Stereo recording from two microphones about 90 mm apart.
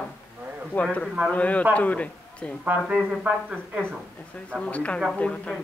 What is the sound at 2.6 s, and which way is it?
Speech, 15° right (ahead or behind).